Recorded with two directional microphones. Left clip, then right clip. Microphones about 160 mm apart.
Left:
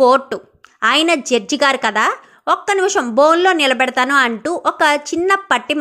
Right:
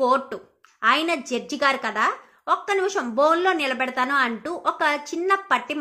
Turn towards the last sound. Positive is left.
turn(degrees=40)  # may be behind; listen again after turning